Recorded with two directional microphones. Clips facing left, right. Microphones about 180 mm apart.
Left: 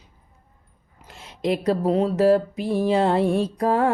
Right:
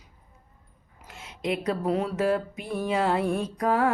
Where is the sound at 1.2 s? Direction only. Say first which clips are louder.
Left 5 dB; 35° left (ahead or behind).